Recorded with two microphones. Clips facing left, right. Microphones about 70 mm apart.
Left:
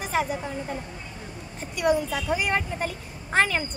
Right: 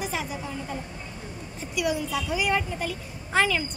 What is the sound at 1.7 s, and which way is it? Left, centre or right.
A woman's voice, left.